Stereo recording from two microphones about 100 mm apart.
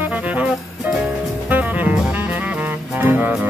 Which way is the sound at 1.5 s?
15° right (ahead or behind).